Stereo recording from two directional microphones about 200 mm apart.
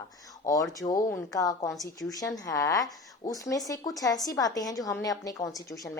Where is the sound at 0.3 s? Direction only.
15° left (ahead or behind).